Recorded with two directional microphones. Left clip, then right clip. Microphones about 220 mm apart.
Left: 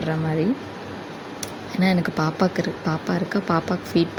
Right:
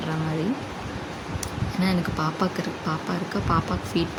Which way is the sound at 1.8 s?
20° left (ahead or behind).